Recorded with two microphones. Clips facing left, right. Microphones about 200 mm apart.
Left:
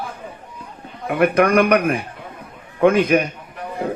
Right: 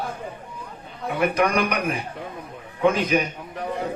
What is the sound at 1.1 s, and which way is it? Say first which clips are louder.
Speech: left 6 dB; 55° left (ahead or behind).